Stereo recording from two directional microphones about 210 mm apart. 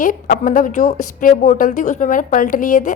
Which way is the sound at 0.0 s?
40° left (ahead or behind).